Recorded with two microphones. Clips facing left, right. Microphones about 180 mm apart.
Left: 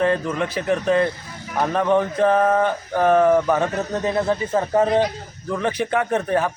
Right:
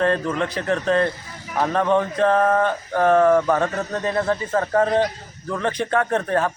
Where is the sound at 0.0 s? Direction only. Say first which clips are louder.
Even; 10° left (ahead or behind).